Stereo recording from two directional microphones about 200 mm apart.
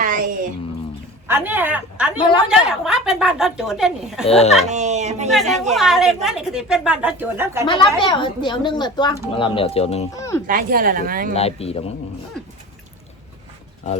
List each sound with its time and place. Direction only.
0.0 s a sound: 45° right (ahead or behind)
1.3 s a woman's voice: 10° right (ahead or behind)
4.3 s speech: 30° left (ahead or behind)
4.7 s speech: 35° right (ahead or behind)
5.3 s a woman's voice: centre (ahead or behind)
7.7 s a woman's voice: 25° left (ahead or behind)
10.1 s speech: 15° left (ahead or behind)
10.4 s a woman's voice: 45° right (ahead or behind)
11.3 s speech: 30° left (ahead or behind)